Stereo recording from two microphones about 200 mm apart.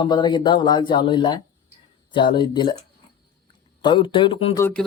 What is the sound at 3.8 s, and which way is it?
Speech, 25° left (ahead or behind).